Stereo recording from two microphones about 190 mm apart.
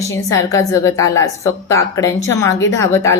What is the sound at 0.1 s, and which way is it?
A woman's voice, 15° left (ahead or behind).